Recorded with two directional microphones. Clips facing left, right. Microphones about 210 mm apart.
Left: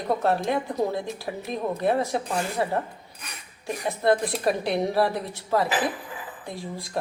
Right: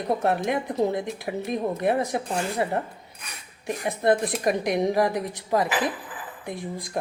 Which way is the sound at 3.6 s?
20° right (ahead or behind).